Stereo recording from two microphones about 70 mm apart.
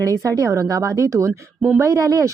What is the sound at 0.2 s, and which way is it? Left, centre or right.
A woman's voice, right.